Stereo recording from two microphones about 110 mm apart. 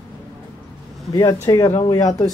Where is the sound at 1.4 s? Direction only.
30° left (ahead or behind).